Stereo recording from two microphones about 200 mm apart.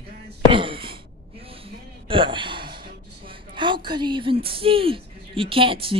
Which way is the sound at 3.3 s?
25° right (ahead or behind).